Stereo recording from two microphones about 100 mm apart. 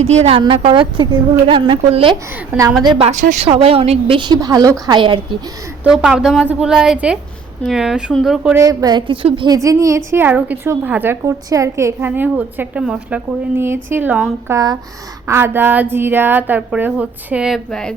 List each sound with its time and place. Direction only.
0.0 s a woman's voice: 90° right
0.5 s a woman's voice: 60° right (ahead or behind)
2.5 s a woman's voice: 15° right (ahead or behind)
3.0 s a woman's voice: 80° right; by 4.4 s 55° right (ahead or behind)
4.4 s a woman's voice: 35° right (ahead or behind)
4.9 s a woman's voice: 55° right (ahead or behind)
5.8 s a woman's voice: 10° right (ahead or behind)
8.5 s a woman's voice: 35° right (ahead or behind)
9.2 s a woman's voice: 60° right (ahead or behind)
9.5 s a woman's voice: 35° right (ahead or behind)
11.4 s a woman's voice: 30° right (ahead or behind)
11.9 s a woman's voice: 20° right (ahead or behind)
17.7 s speech: 5° left (ahead or behind)